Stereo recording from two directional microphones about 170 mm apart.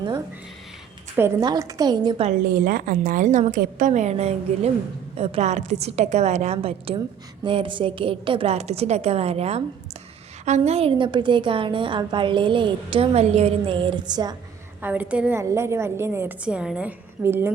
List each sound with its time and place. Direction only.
1.1 s a woman's voice: 15° right (ahead or behind); by 2.3 s 30° right (ahead or behind)
2.5 s a woman's voice: 55° right (ahead or behind); by 14.3 s 25° right (ahead or behind)
14.8 s a woman's voice: 10° right (ahead or behind)